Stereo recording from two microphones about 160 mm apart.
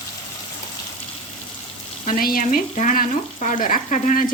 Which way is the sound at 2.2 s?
65° left (ahead or behind).